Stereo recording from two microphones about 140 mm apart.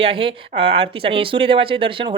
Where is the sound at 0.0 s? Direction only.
40° right (ahead or behind).